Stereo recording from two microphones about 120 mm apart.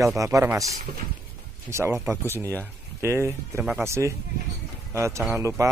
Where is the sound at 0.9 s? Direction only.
60° right (ahead or behind).